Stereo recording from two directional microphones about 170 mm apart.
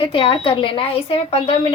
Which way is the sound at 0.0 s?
30° left (ahead or behind).